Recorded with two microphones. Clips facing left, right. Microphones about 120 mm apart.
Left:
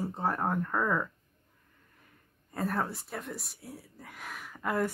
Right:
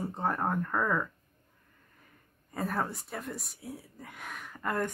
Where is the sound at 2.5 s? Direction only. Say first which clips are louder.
Left 1 dB; centre (ahead or behind).